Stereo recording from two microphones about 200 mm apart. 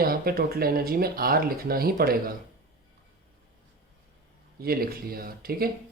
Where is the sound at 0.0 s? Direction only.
50° right (ahead or behind).